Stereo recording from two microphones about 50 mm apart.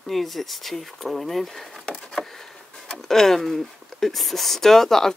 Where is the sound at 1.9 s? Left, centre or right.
Centre.